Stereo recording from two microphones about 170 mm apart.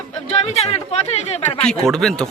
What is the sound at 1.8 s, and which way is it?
Speech, centre (ahead or behind).